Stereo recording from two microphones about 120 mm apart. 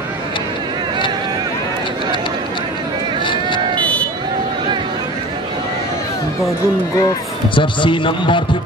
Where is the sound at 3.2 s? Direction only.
40° left (ahead or behind).